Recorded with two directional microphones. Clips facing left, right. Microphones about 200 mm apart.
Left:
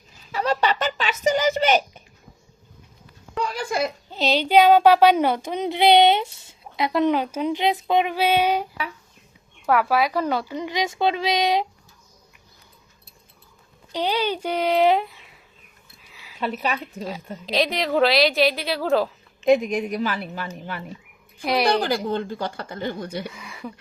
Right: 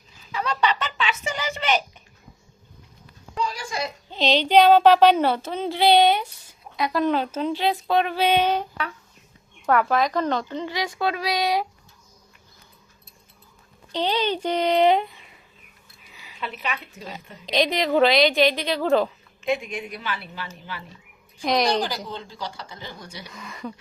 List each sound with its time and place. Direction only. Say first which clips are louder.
0.3 s a sound: left 2 dB; 40° left (ahead or behind)
3.3 s a sound: left 3 dB; 55° left (ahead or behind)
4.1 s a woman's voice: right 1 dB; 5° left (ahead or behind)
13.9 s speech: even; 10° left (ahead or behind)
16.1 s a sound: even; centre (ahead or behind)
16.4 s a woman's voice: left 6 dB; 40° left (ahead or behind)
17.4 s a woman's voice: right 1 dB; centre (ahead or behind)
19.5 s a woman's voice: left 8 dB; 40° left (ahead or behind)
21.4 s speech: even; 5° left (ahead or behind)
21.7 s speech: left 4 dB; 55° left (ahead or behind)
23.3 s speech: right 1 dB; 5° left (ahead or behind)